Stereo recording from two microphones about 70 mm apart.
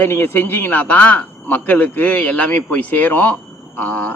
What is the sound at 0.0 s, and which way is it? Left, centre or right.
Speech, left.